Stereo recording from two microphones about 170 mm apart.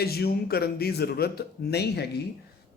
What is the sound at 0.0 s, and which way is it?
Speech, 65° left (ahead or behind).